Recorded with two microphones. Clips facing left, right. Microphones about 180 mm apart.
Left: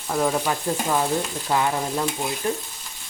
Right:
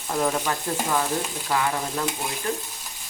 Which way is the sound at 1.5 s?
20° left (ahead or behind).